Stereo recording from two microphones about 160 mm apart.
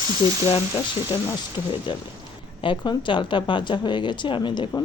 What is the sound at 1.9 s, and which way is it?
Speech, 30° left (ahead or behind).